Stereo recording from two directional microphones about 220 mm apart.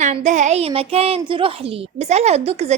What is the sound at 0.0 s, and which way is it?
A woman's voice, 30° right (ahead or behind).